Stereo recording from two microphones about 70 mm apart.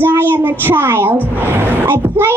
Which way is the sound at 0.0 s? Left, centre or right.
Right.